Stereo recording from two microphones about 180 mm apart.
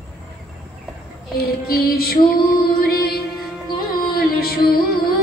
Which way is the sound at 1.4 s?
60° left (ahead or behind).